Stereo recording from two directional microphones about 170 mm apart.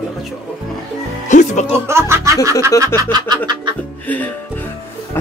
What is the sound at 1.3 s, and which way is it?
Music, 45° left (ahead or behind).